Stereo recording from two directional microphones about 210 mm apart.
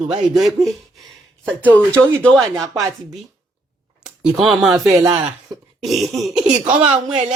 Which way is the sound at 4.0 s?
Centre (ahead or behind).